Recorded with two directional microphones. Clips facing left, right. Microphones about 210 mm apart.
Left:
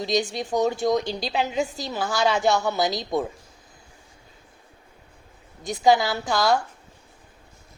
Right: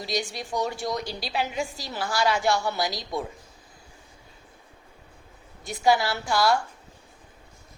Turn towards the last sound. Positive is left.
turn(degrees=20)  # may be behind; listen again after turning